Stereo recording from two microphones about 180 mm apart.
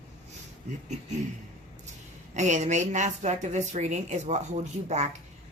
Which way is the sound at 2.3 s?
40° right (ahead or behind).